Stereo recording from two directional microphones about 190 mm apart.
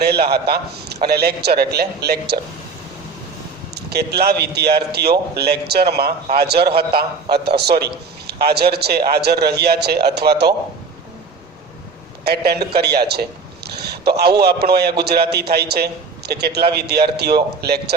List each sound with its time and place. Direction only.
0.0 s a man's voice: 60° right (ahead or behind)
3.8 s a man's voice: 60° right (ahead or behind)
12.2 s a man's voice: 55° right (ahead or behind)